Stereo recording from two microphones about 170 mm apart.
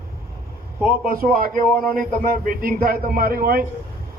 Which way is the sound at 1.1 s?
60° right (ahead or behind).